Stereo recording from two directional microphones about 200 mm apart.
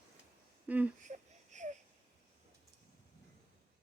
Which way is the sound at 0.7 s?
10° right (ahead or behind).